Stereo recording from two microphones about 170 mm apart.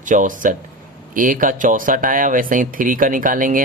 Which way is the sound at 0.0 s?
50° right (ahead or behind).